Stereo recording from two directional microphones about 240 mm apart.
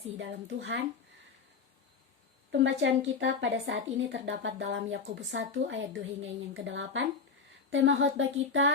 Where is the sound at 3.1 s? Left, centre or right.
Right.